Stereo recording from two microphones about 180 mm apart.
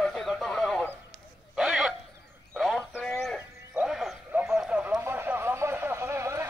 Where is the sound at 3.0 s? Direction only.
10° left (ahead or behind).